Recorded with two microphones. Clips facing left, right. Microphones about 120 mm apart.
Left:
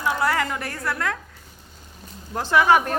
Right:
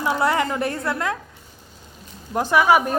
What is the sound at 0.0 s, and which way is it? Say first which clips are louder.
A man's voice: right 2 dB; 25° right (ahead or behind).